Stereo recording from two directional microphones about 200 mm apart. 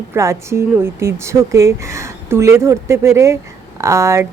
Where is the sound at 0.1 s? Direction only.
15° right (ahead or behind).